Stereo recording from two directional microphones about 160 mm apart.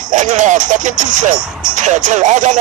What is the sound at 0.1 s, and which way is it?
Speech, 50° right (ahead or behind).